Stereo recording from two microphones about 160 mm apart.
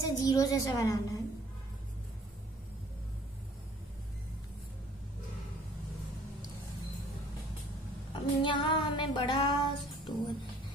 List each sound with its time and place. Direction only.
0.0 s a woman's voice: 25° left (ahead or behind)
8.1 s female singing: 30° left (ahead or behind)